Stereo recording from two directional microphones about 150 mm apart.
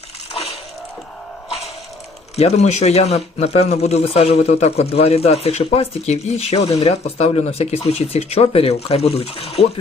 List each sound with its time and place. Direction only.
2.3 s speech: 45° left (ahead or behind)